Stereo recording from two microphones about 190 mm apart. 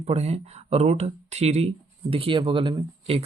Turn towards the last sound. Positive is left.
turn(degrees=-30)  # may be behind; listen again after turning